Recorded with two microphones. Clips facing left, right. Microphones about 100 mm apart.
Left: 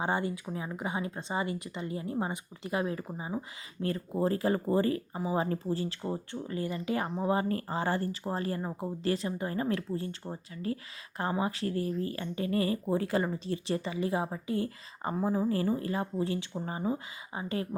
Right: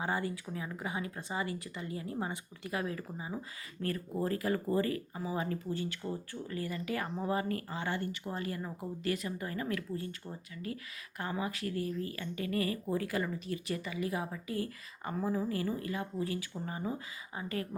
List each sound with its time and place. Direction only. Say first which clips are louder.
0.0 s speech: left 4 dB; 25° left (ahead or behind)